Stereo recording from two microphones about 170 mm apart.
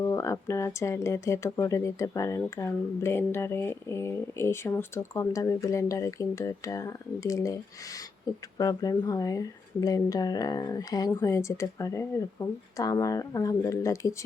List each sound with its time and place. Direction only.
0.0 s speech: 15° left (ahead or behind)